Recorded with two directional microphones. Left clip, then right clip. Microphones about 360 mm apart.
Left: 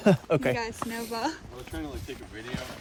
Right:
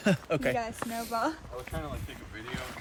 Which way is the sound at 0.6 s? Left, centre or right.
Centre.